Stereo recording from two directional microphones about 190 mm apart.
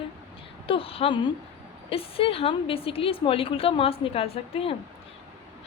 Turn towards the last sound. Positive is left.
turn(degrees=30)  # may be behind; listen again after turning